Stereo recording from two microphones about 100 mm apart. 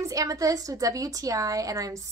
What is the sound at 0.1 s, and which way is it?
A woman's voice, 35° right (ahead or behind).